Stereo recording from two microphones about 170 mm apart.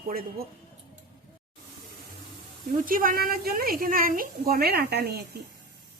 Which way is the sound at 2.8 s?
55° right (ahead or behind).